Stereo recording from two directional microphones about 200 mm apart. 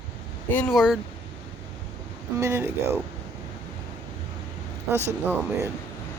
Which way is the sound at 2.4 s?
10° right (ahead or behind).